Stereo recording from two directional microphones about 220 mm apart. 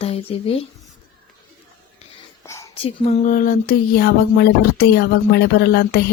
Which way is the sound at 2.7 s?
30° left (ahead or behind).